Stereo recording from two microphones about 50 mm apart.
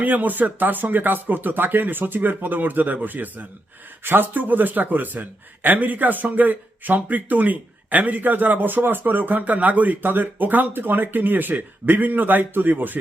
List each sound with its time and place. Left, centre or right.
0.0 s a man's voice: right